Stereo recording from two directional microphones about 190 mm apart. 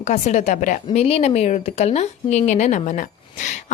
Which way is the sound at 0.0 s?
35° left (ahead or behind).